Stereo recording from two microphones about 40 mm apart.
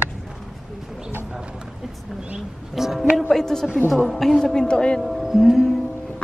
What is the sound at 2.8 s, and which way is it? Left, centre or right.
Music, centre.